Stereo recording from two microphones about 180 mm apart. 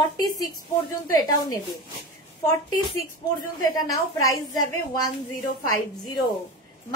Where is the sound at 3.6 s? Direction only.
20° left (ahead or behind).